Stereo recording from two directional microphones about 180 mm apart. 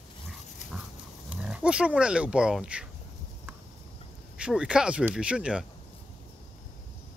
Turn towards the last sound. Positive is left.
turn(degrees=-5)  # may be behind; listen again after turning